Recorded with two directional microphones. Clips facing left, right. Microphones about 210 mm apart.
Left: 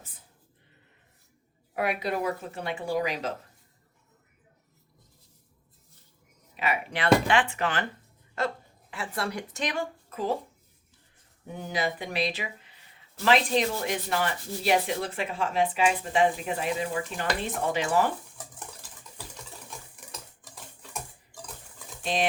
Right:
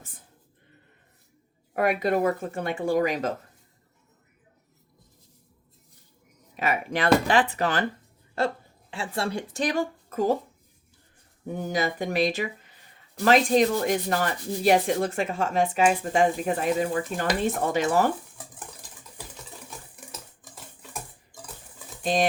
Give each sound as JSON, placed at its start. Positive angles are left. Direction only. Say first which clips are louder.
{"t": 1.7, "sound": "sanding", "louder": "right 5 dB", "side_deg": -45}
{"t": 6.6, "sound": "speech", "louder": "right 3 dB", "side_deg": -45}
{"t": 11.4, "sound": "sanding", "louder": "right 3 dB", "side_deg": -45}
{"t": 22.0, "sound": "speech", "louder": "right 4 dB", "side_deg": -40}